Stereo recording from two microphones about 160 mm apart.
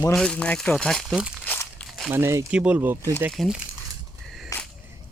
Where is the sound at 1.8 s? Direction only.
Centre (ahead or behind).